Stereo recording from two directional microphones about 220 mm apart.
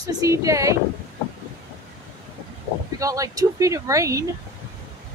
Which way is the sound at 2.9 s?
15° right (ahead or behind).